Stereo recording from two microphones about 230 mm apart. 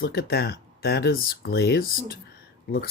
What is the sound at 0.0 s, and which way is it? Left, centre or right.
Speech, left.